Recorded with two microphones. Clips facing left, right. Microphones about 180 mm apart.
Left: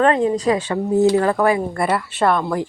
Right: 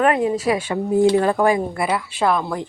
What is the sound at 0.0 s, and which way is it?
Speech, 10° right (ahead or behind).